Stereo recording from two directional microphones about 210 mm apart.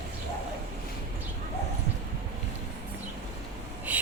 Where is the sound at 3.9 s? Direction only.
5° right (ahead or behind).